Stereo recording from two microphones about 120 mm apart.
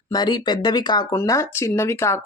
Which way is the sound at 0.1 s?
35° left (ahead or behind).